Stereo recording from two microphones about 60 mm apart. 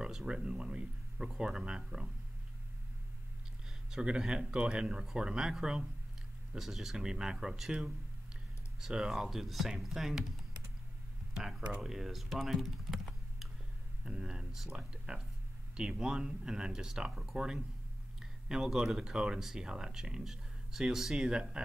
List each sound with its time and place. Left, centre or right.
0.0 s speech: centre
3.9 s speech: centre
8.8 s speech: centre
14.0 s speech: centre